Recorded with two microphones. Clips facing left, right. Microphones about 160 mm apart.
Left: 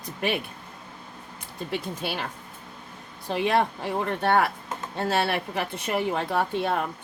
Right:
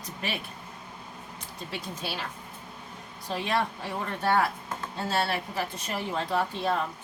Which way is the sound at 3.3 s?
60° left (ahead or behind).